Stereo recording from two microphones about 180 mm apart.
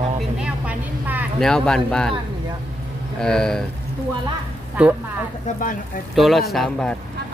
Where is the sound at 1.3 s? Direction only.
5° left (ahead or behind).